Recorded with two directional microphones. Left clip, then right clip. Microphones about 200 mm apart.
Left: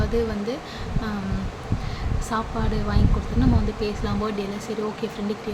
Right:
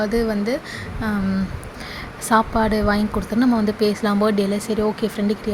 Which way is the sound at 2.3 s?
45° right (ahead or behind).